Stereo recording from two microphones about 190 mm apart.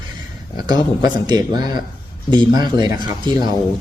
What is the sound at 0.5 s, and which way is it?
Speech, 25° right (ahead or behind).